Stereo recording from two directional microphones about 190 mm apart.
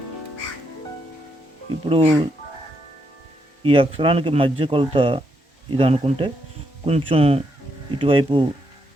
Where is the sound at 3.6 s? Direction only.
30° right (ahead or behind).